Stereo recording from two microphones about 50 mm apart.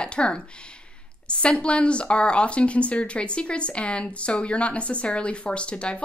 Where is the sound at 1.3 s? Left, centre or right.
Left.